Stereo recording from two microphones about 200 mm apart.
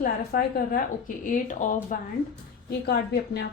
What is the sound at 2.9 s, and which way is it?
Speech, 55° left (ahead or behind).